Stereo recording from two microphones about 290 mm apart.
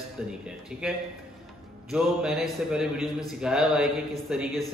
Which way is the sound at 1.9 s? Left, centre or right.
Centre.